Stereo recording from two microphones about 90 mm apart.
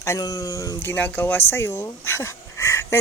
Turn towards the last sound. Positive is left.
turn(degrees=30)  # may be behind; listen again after turning